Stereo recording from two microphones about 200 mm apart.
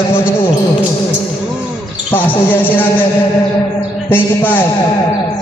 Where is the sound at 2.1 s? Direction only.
10° left (ahead or behind).